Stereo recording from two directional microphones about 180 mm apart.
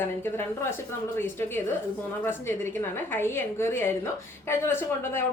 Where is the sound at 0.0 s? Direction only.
10° left (ahead or behind).